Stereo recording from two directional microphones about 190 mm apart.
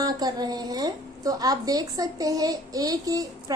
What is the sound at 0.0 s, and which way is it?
A woman's voice, 20° right (ahead or behind).